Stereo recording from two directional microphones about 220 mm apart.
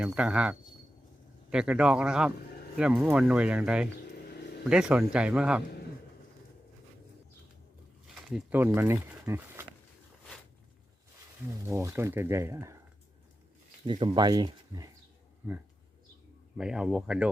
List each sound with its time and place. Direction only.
0.0 s speech: 5° right (ahead or behind)
8.0 s speech: centre (ahead or behind)
11.7 s speech: 10° right (ahead or behind)
13.8 s speech: 20° right (ahead or behind)
16.6 s speech: centre (ahead or behind)